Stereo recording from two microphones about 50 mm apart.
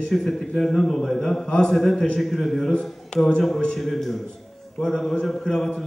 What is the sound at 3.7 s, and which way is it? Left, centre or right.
A man's voice, centre.